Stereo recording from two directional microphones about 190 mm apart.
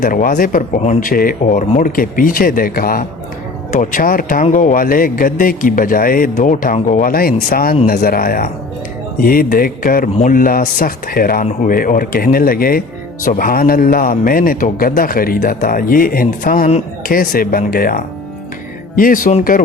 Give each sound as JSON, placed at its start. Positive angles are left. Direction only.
{"t": 0.0, "sound": "speech", "side_deg": 45}